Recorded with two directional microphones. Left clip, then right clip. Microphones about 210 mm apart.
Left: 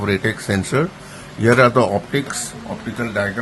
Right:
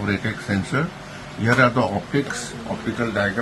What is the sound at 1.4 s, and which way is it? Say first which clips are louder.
Speech: left 5 dB; 60° left (ahead or behind).